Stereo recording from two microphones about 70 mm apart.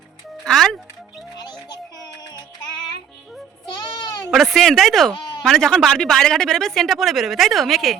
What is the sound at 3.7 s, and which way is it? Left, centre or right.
Sheep, left.